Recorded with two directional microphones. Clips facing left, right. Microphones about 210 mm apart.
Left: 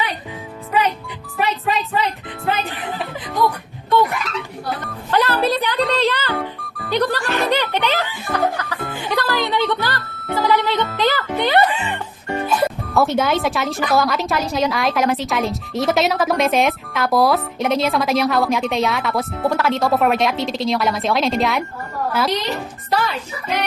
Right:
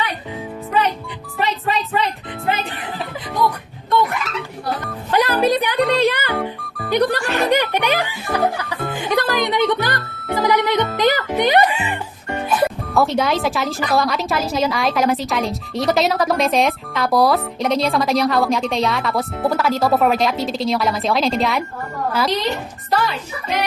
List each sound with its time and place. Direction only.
1.4 s music: centre (ahead or behind)
5.1 s speech: 15° right (ahead or behind)
6.6 s music: centre (ahead or behind)
6.9 s music: 15° right (ahead or behind)
10.0 s music: centre (ahead or behind)
10.2 s music: 15° right (ahead or behind)
12.6 s speech: centre (ahead or behind)